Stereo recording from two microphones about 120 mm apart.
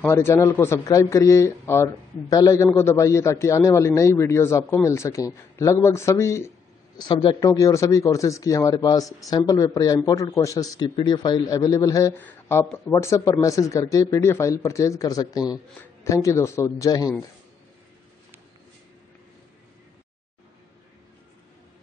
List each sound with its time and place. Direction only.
0.0 s a man's voice: 20° left (ahead or behind)
7.0 s a man's voice: 40° left (ahead or behind)
7.4 s a man's voice: 25° left (ahead or behind)
11.0 s a man's voice: 40° left (ahead or behind)
12.1 s a man's voice: 15° left (ahead or behind)